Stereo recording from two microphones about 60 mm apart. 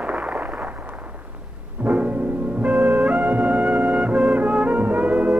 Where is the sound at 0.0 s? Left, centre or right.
Right.